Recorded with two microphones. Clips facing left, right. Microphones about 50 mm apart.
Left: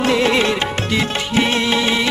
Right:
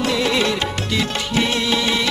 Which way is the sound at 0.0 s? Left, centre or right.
Left.